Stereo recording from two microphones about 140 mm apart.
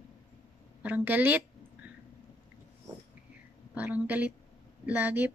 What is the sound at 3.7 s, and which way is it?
A woman's voice, 10° right (ahead or behind).